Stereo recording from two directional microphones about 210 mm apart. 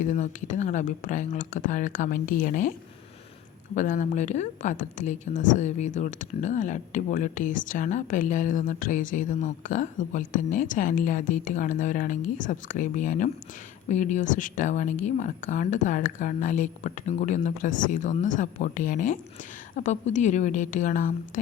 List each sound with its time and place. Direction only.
0.0 s speech: 35° left (ahead or behind)
3.8 s speech: 35° left (ahead or behind)